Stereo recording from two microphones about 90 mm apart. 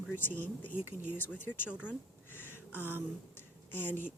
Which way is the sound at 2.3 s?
25° left (ahead or behind).